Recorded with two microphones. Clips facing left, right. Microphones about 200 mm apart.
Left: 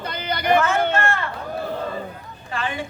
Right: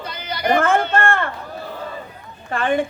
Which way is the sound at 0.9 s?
55° right (ahead or behind).